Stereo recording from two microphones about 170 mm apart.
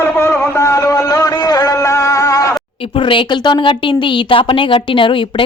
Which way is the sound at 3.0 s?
30° left (ahead or behind).